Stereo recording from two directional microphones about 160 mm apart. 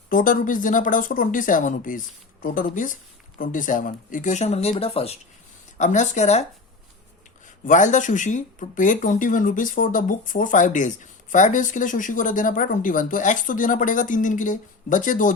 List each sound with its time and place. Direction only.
0.1 s speech: 60° left (ahead or behind); by 5.1 s 40° left (ahead or behind)
5.7 s a woman's voice: 50° left (ahead or behind)
7.6 s speech: 50° left (ahead or behind)